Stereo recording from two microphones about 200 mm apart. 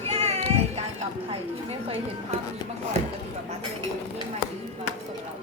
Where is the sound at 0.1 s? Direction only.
30° right (ahead or behind).